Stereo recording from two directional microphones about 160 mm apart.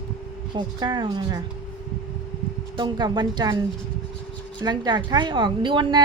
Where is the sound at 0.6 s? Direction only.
30° right (ahead or behind).